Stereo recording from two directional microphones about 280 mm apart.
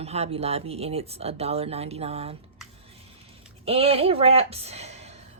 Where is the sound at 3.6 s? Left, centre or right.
Right.